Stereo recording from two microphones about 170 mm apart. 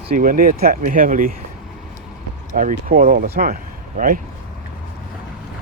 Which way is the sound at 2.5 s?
55° right (ahead or behind).